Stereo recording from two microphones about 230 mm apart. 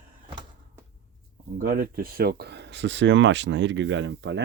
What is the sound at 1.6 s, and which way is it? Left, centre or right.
Speech, right.